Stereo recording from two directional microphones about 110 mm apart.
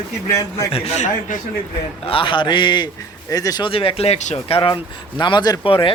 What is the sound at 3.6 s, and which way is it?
Speech, 55° left (ahead or behind).